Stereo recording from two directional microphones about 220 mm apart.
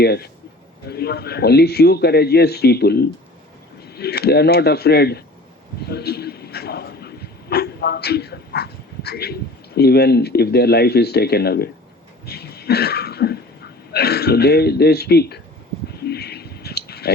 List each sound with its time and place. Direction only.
0.0 s speech: 45° left (ahead or behind)
12.2 s throat clearing: 45° left (ahead or behind)
13.9 s speech: 45° left (ahead or behind)
16.0 s a sound: 45° left (ahead or behind)